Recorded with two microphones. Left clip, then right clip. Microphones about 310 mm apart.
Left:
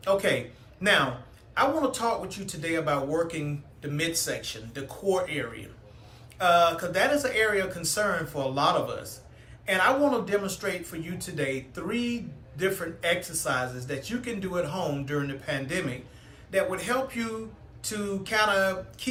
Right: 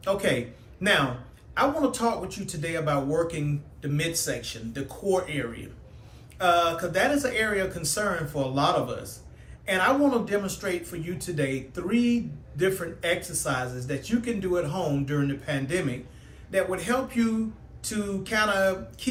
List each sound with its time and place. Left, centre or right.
0.0 s speech: centre